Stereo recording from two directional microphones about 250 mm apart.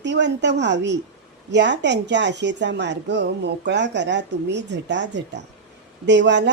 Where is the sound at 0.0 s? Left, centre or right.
Right.